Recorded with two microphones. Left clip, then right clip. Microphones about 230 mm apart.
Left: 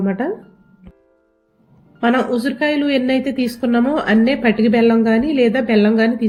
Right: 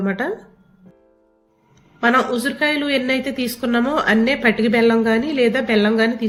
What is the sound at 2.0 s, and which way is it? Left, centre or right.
A woman's voice, centre.